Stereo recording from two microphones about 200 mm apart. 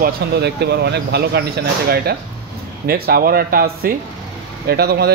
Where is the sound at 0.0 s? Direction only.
55° right (ahead or behind).